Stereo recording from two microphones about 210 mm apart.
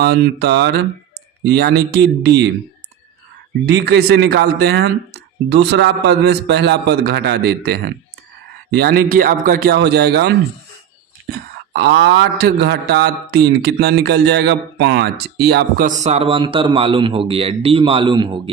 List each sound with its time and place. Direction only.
0.0 s a man's voice: 50° right (ahead or behind)
3.8 s a man's voice: 50° right (ahead or behind); by 18.5 s 25° right (ahead or behind)